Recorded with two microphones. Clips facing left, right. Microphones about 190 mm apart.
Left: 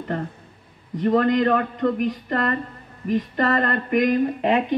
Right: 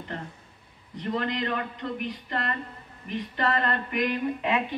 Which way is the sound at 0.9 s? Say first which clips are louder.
Left 11 dB; 50° left (ahead or behind).